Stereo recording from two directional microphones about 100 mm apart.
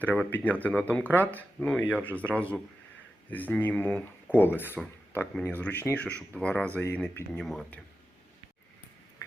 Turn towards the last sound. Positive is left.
turn(degrees=5)  # may be behind; listen again after turning